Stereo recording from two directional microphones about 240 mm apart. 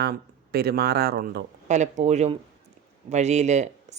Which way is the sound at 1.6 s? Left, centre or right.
Right.